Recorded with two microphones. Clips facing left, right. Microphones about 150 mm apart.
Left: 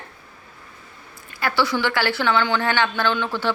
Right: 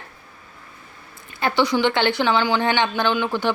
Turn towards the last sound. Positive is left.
turn(degrees=-15)  # may be behind; listen again after turning